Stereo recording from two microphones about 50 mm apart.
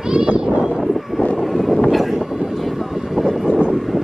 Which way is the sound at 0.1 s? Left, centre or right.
Centre.